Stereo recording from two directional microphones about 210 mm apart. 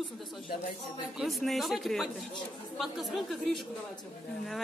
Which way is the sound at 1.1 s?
Centre (ahead or behind).